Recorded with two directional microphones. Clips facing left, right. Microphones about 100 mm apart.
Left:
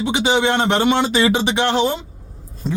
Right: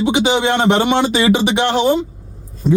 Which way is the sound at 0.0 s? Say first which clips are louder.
Right 2 dB; 20° right (ahead or behind).